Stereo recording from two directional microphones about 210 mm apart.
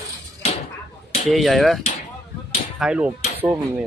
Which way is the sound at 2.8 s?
5° right (ahead or behind).